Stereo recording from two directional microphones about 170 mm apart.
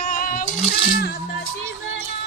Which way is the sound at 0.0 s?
60° left (ahead or behind).